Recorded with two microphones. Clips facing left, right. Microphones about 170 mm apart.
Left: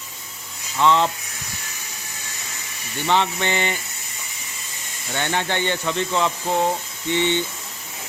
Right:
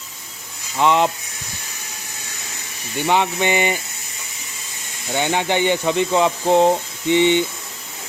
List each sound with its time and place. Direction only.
0.8 s speech: 15° right (ahead or behind)
3.1 s speech: 15° right (ahead or behind)
5.1 s speech: 15° right (ahead or behind)